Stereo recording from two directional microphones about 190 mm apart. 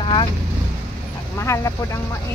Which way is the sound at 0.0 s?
25° left (ahead or behind).